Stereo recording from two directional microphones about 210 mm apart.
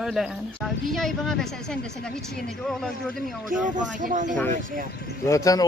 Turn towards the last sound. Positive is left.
turn(degrees=15)  # may be behind; listen again after turning